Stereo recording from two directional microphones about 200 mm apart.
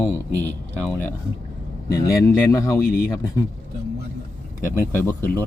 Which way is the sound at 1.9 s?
15° left (ahead or behind).